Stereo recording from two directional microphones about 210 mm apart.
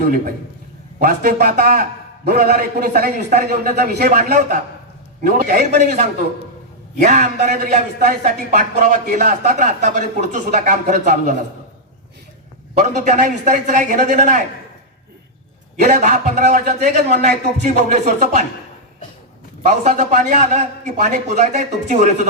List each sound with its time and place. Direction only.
0.9 s a man's voice: 45° right (ahead or behind)
7.0 s a man's voice: 35° right (ahead or behind)
12.9 s a man's voice: 35° right (ahead or behind)
15.8 s a man's voice: 35° right (ahead or behind)
19.8 s a man's voice: 35° right (ahead or behind)